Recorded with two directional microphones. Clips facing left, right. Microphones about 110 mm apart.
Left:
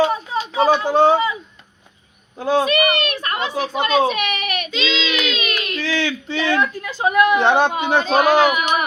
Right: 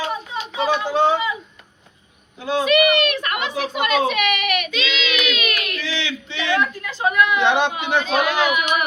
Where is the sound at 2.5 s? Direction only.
40° left (ahead or behind).